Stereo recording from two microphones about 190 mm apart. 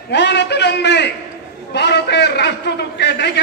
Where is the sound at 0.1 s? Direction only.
65° left (ahead or behind).